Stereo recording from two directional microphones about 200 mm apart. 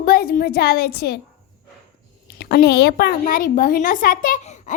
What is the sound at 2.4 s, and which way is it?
A woman's voice, 55° left (ahead or behind).